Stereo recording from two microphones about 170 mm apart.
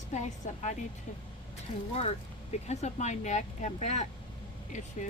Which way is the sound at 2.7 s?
40° left (ahead or behind).